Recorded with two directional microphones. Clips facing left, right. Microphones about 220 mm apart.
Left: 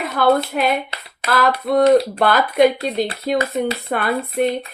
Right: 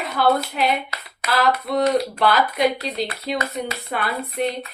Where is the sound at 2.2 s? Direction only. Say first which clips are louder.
Left 5 dB; 50° left (ahead or behind).